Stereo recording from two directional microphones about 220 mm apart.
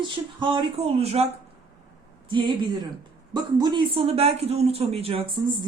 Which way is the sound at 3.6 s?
20° right (ahead or behind).